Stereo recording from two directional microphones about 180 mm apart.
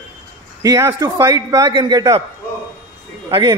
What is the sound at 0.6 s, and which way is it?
A man's voice, 15° right (ahead or behind).